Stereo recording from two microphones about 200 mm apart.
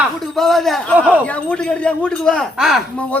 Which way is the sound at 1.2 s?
5° left (ahead or behind).